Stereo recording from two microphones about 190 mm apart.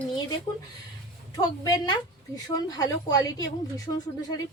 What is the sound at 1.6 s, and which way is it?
A woman's voice, 20° left (ahead or behind).